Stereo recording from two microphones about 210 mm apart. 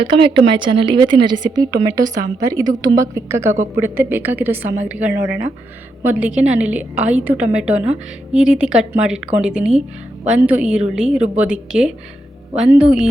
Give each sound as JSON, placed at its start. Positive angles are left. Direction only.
{"t": 0.0, "sound": "a woman's voice", "side_deg": -25}